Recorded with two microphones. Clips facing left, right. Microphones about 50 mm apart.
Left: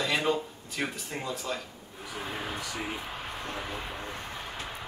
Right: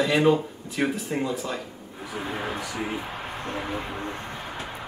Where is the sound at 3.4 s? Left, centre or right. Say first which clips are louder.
Right 7 dB; right.